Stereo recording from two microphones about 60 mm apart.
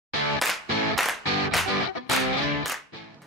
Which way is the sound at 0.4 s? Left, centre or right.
Centre.